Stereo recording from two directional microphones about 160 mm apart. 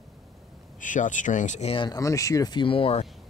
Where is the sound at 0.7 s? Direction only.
50° left (ahead or behind).